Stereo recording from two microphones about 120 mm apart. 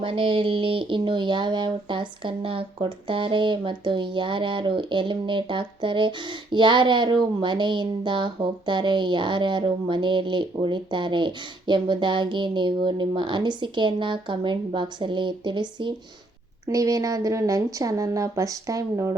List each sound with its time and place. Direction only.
0.0 s speech: 45° right (ahead or behind)
16.6 s speech: 30° right (ahead or behind)